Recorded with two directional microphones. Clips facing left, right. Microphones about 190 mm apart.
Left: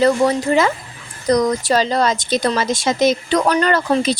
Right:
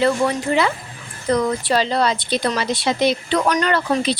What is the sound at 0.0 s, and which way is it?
A woman's voice, 40° left (ahead or behind).